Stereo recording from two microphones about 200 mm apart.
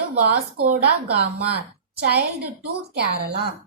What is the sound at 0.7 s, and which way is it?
Speech, 55° right (ahead or behind).